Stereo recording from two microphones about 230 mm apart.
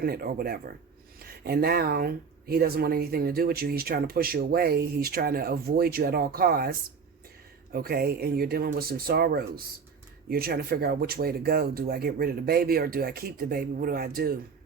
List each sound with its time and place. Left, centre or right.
0.0 s speech: right
7.7 s speech: right